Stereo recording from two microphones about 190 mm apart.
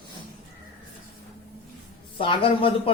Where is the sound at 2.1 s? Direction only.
25° left (ahead or behind).